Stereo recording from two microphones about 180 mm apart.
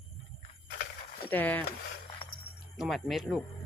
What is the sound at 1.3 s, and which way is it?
Speech, 10° left (ahead or behind).